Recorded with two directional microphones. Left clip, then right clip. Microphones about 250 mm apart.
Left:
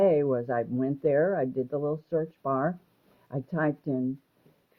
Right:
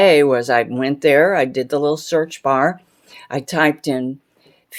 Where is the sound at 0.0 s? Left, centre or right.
Centre.